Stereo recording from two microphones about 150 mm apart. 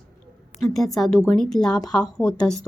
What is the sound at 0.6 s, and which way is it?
A woman's voice, centre (ahead or behind).